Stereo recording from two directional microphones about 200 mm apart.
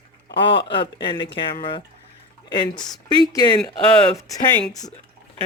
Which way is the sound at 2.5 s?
25° left (ahead or behind).